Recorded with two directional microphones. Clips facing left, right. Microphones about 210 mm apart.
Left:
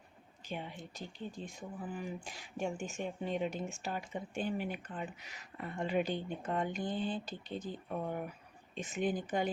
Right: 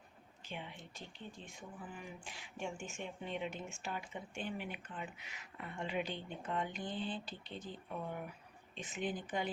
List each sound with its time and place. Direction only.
0.4 s a woman's voice: 40° left (ahead or behind)